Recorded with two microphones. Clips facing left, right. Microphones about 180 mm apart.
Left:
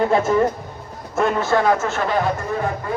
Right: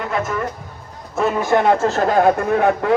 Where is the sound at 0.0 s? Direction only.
30° left (ahead or behind).